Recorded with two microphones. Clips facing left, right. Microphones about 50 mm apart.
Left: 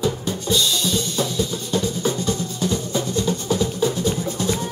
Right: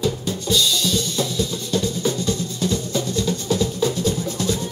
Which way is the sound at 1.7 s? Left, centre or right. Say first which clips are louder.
Right 1 dB; left.